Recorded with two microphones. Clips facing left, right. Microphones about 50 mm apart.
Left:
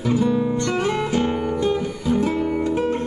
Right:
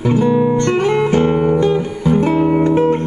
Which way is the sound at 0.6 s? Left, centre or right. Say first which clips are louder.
Right 7 dB; right.